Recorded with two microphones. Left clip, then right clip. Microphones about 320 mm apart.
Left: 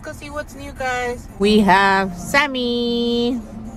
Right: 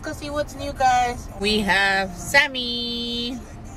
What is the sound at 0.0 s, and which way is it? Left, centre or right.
Speech, centre.